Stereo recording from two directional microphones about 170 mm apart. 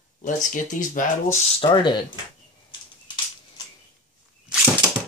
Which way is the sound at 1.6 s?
25° left (ahead or behind).